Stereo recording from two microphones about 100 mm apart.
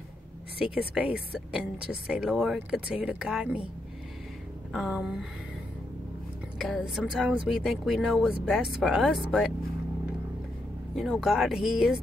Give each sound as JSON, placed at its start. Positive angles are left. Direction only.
{"t": 0.6, "sound": "speech", "side_deg": -10}
{"t": 4.7, "sound": "speech", "side_deg": -5}
{"t": 6.6, "sound": "speech", "side_deg": -5}
{"t": 11.0, "sound": "speech", "side_deg": -5}